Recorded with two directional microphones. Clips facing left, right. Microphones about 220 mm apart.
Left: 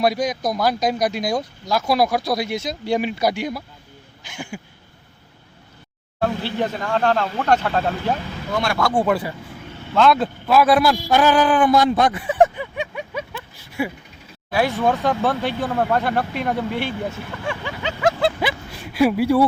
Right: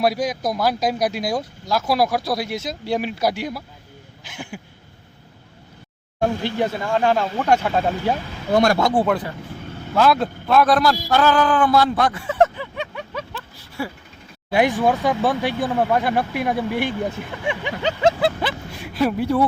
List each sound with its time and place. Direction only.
0.0 s speech: 5° right (ahead or behind)
6.1 s speech: 15° right (ahead or behind)
8.5 s speech: 40° right (ahead or behind)
9.0 s a man's voice: 5° left (ahead or behind)
14.5 s speech: 15° right (ahead or behind)
18.9 s speech: 10° left (ahead or behind)